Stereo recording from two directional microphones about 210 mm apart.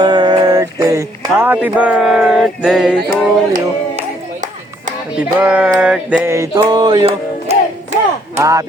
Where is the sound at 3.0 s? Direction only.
45° right (ahead or behind).